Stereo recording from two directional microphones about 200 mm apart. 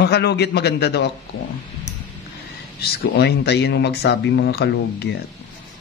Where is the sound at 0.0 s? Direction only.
55° left (ahead or behind).